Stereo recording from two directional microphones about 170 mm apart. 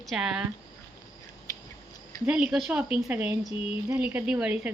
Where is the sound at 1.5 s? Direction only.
20° left (ahead or behind).